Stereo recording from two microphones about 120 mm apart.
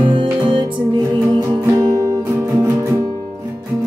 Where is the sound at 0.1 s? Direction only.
45° right (ahead or behind).